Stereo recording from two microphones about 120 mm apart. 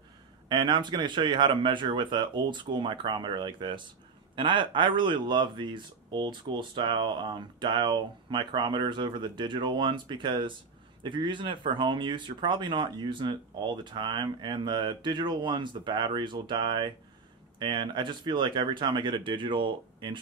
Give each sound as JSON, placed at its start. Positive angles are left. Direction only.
{"t": 0.5, "sound": "speech", "side_deg": -40}